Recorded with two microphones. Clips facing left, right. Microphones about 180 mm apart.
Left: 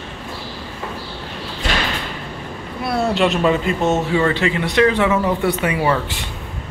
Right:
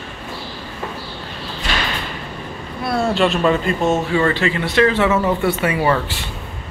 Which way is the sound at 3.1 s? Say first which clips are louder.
Even; 15° left (ahead or behind).